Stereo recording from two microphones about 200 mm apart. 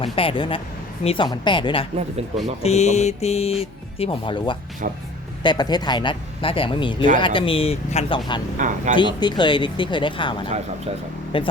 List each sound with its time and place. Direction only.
0.0 s speech: 25° left (ahead or behind)
8.5 s speech: 40° right (ahead or behind)
9.0 s speech: 20° left (ahead or behind)